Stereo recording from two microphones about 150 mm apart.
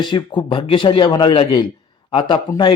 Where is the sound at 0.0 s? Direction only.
30° left (ahead or behind).